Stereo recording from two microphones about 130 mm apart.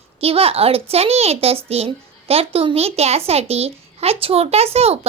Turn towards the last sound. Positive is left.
turn(degrees=-50)  # may be behind; listen again after turning